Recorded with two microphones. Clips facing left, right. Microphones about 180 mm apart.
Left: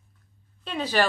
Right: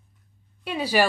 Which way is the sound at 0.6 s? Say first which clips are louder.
Right 2 dB; 10° right (ahead or behind).